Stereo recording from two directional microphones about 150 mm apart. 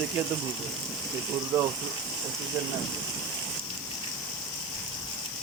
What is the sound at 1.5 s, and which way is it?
Speech, 20° right (ahead or behind).